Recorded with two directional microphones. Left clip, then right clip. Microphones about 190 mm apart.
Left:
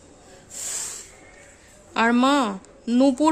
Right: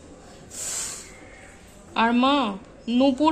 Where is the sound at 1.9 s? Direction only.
40° left (ahead or behind).